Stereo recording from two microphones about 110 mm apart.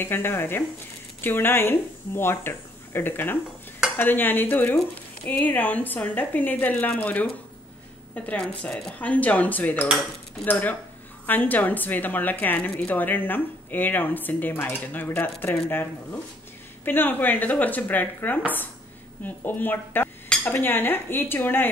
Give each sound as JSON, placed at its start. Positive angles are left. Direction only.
{"t": 0.0, "sound": "speech", "side_deg": 20}